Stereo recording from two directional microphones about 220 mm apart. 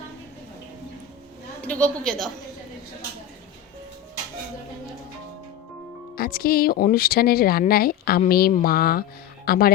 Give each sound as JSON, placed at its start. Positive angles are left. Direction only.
{"t": 1.6, "sound": "a woman's voice", "side_deg": 5}
{"t": 6.1, "sound": "speech", "side_deg": 45}